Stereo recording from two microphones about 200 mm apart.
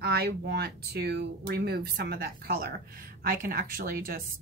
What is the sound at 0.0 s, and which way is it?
Speech, 50° right (ahead or behind).